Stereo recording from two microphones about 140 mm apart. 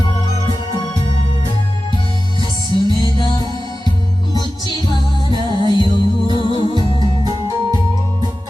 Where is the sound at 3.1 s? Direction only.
35° left (ahead or behind).